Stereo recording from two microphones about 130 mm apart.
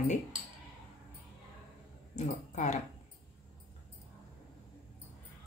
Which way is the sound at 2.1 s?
65° left (ahead or behind).